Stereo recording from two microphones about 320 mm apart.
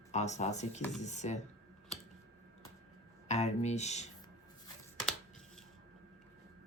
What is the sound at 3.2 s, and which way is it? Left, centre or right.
Speech, left.